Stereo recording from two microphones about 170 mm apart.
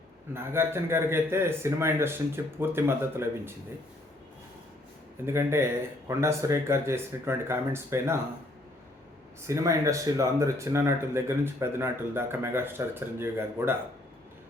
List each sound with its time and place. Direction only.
0.3 s speech: 15° right (ahead or behind)
5.2 s speech: 15° right (ahead or behind)
9.5 s speech: 20° right (ahead or behind)